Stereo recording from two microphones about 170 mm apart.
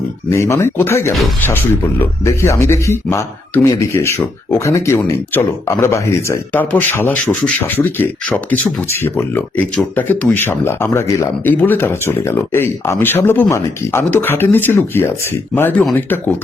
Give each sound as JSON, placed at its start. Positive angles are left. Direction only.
{"t": 0.3, "sound": "speech", "side_deg": 15}